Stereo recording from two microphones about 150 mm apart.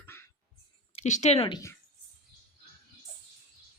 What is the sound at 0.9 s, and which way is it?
Speech, 50° left (ahead or behind).